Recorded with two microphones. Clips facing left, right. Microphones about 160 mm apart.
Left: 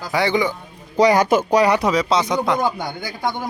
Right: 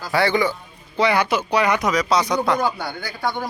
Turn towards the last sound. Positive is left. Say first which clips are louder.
# left 1 dB
turn(degrees=15)  # may be behind; listen again after turning